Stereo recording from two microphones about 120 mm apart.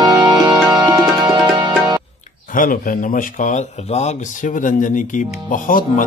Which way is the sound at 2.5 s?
90° left.